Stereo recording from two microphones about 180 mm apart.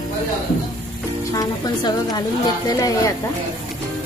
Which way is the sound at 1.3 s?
20° left (ahead or behind).